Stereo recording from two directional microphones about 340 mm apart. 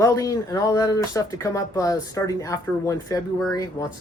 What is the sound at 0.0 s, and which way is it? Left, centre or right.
Speech, centre.